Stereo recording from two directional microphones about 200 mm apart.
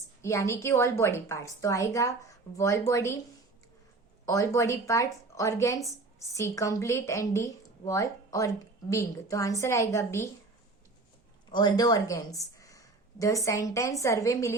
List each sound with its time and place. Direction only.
0.2 s a woman's voice: 15° left (ahead or behind)
4.3 s a woman's voice: 15° left (ahead or behind)
11.5 s a woman's voice: 20° left (ahead or behind)